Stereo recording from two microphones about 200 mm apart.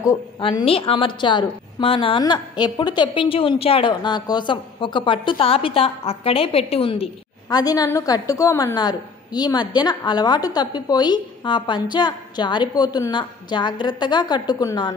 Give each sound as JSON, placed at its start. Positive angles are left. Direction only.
{"t": 0.4, "sound": "a woman's voice", "side_deg": 25}